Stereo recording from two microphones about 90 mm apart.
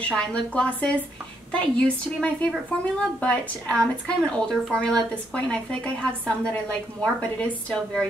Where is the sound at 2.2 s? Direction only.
15° left (ahead or behind).